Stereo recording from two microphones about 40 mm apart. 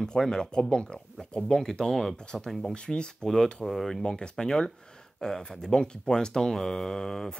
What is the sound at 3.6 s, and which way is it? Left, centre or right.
Speech, centre.